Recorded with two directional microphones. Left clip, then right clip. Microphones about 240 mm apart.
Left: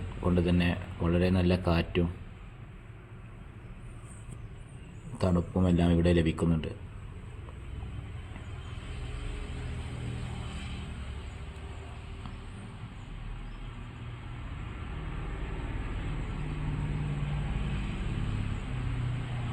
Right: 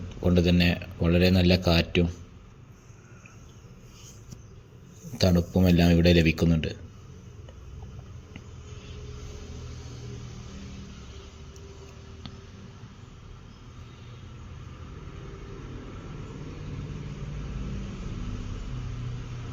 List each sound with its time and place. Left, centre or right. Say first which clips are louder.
0.3 s a man's voice: right 5 dB; right
5.1 s a man's voice: right 5 dB; right